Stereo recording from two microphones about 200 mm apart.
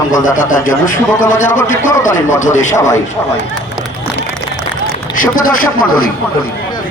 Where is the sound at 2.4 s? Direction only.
40° left (ahead or behind).